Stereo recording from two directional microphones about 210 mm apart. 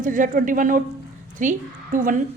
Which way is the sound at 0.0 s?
40° right (ahead or behind).